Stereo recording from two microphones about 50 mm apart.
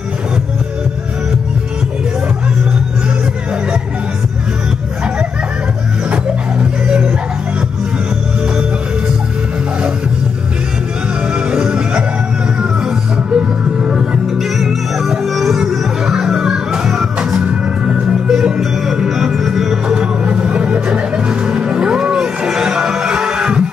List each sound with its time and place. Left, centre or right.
6.6 s dog: right
11.5 s music: centre
19.9 s music: centre